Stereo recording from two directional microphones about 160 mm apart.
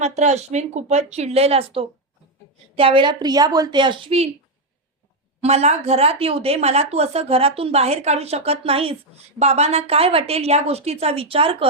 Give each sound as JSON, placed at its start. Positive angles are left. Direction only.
{"t": 0.0, "sound": "a woman's voice", "side_deg": -45}
{"t": 5.4, "sound": "a woman's voice", "side_deg": -40}